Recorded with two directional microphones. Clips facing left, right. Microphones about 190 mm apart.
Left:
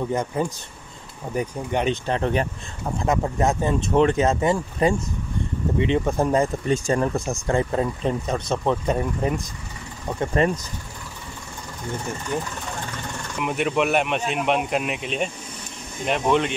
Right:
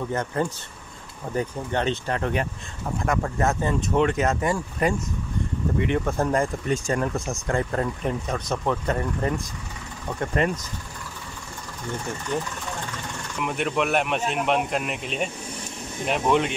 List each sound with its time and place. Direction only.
0.1 s speech: 10° left (ahead or behind)
2.0 s speech: 25° left (ahead or behind)
3.9 s speech: 30° left (ahead or behind)
7.4 s speech: 20° left (ahead or behind)
8.8 s speech: 10° left (ahead or behind)
10.4 s speech: 35° left (ahead or behind)
12.3 s speech: 10° left (ahead or behind)